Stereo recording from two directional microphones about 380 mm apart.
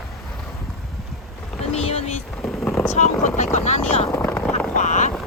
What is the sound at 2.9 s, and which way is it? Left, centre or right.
Speech, centre.